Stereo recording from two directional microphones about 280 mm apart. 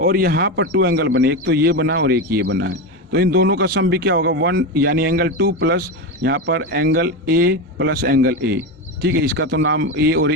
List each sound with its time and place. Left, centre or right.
0.0 s a man's voice: right